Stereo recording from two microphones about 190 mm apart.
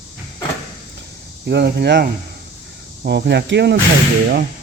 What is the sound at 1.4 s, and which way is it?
Speech, 60° right (ahead or behind).